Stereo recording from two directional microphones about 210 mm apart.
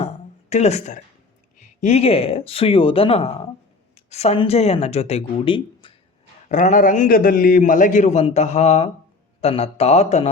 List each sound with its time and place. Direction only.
0.5 s a man's voice: 30° left (ahead or behind)
6.5 s a man's voice: 35° left (ahead or behind)